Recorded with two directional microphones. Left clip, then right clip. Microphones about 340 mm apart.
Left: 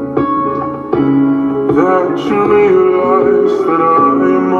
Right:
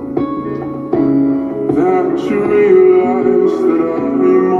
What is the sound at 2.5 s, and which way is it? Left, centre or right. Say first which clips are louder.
Music: right 1 dB; centre.